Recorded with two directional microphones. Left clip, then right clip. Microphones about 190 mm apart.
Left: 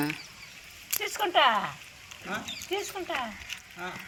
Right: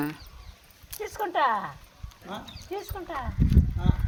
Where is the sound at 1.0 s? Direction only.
35° right (ahead or behind).